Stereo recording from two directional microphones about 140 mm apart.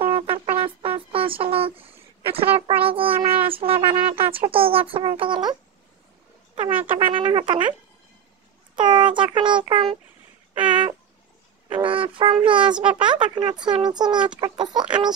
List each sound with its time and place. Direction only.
0.1 s music: 40° right (ahead or behind)
2.2 s speech: 40° right (ahead or behind)
8.7 s speech: 35° right (ahead or behind)